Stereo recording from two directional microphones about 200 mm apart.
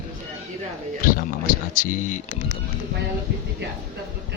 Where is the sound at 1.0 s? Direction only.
45° left (ahead or behind).